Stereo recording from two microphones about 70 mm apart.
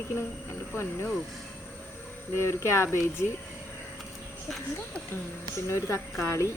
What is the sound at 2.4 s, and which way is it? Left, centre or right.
Speech, left.